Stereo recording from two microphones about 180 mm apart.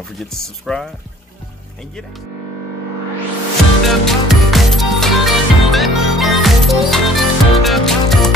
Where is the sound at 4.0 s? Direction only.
Centre (ahead or behind).